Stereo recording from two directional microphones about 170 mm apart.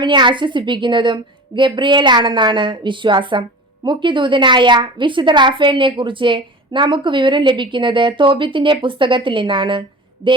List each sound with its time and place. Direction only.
0.0 s a woman's voice: 25° right (ahead or behind)